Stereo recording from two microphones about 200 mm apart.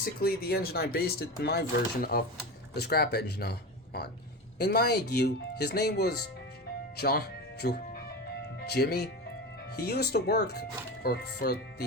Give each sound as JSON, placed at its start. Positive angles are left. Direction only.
{"t": 0.0, "sound": "speech", "side_deg": 50}